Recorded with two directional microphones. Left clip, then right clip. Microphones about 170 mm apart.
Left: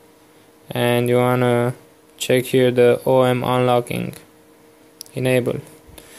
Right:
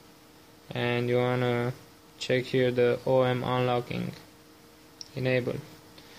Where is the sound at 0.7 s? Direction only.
50° left (ahead or behind).